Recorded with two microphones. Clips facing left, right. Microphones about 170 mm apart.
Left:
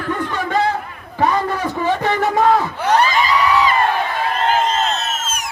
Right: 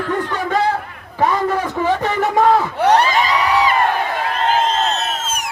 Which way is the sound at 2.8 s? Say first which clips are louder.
Right 2 dB; 70° right (ahead or behind).